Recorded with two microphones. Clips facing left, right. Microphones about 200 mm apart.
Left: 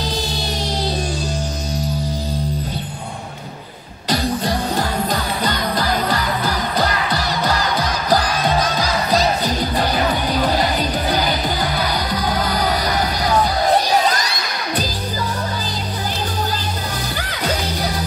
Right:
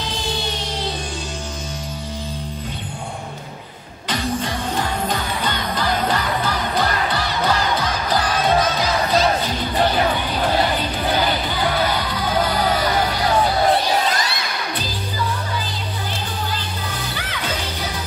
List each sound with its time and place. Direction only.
0.0 s music: 40° left (ahead or behind)
4.1 s music: 35° left (ahead or behind)
13.7 s crowd: 40° left (ahead or behind)
17.3 s music: 40° left (ahead or behind)